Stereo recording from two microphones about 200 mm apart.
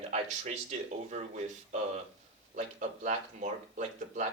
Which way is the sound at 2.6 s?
40° right (ahead or behind).